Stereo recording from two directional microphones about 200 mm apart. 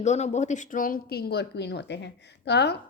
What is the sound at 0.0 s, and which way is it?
A woman's voice, 35° left (ahead or behind).